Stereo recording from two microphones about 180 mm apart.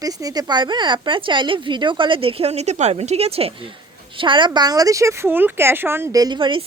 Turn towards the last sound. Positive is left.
turn(degrees=-25)  # may be behind; listen again after turning